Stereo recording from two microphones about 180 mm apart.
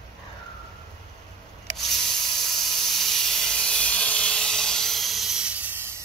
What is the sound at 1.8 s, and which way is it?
Hiss, centre (ahead or behind).